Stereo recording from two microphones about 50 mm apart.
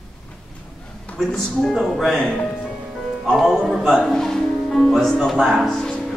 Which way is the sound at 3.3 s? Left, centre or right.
Centre.